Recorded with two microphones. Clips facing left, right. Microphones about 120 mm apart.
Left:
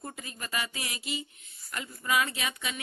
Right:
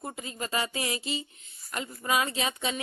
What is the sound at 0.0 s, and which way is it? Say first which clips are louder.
Speech: right 5 dB; 25° right (ahead or behind).